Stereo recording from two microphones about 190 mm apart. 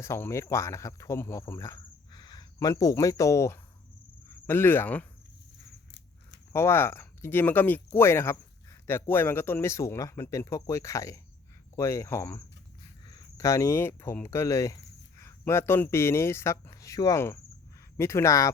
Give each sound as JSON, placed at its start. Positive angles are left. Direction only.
{"t": 0.0, "sound": "speech", "side_deg": 15}
{"t": 6.5, "sound": "speech", "side_deg": 15}